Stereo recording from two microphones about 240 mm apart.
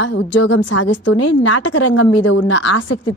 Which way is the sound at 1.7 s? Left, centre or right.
Left.